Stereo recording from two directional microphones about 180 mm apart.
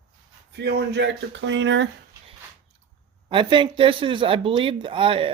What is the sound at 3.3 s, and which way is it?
Speech, 25° right (ahead or behind).